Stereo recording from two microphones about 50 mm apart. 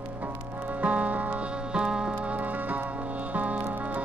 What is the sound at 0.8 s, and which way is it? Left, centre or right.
Music, right.